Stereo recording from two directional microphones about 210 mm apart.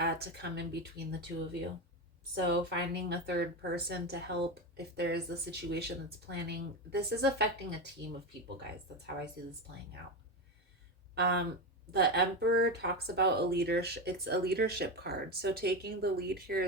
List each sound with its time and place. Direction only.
0.0 s speech: 50° right (ahead or behind)
2.3 s speech: 50° right (ahead or behind)
11.1 s speech: 50° right (ahead or behind)